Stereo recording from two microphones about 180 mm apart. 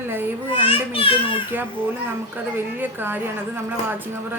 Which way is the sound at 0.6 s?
30° left (ahead or behind).